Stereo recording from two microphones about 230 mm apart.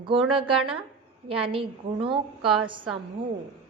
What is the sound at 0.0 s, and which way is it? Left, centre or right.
A woman's voice, right.